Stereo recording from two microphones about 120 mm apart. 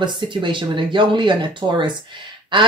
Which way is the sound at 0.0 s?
40° right (ahead or behind).